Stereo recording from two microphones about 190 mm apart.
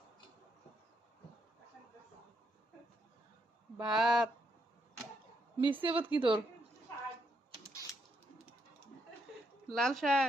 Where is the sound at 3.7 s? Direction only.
5° right (ahead or behind).